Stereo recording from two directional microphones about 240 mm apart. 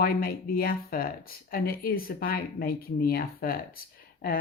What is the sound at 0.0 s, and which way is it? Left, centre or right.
Speech, left.